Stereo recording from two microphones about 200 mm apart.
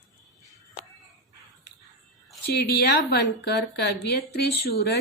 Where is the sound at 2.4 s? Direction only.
55° left (ahead or behind).